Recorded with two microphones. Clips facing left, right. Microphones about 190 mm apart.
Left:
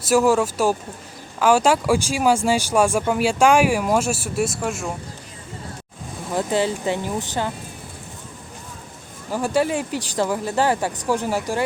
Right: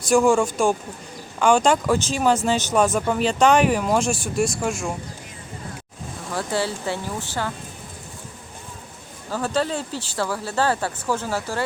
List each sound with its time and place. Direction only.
0.1 s speech: 5° left (ahead or behind)
6.3 s speech: 15° left (ahead or behind)
9.3 s speech: 10° left (ahead or behind)